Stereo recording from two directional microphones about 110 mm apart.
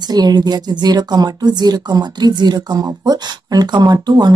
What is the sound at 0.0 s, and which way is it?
Speech, 40° right (ahead or behind).